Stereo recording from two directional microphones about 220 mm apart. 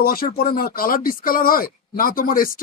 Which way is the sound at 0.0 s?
45° left (ahead or behind).